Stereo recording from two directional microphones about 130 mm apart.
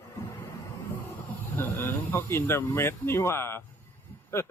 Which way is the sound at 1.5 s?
20° left (ahead or behind).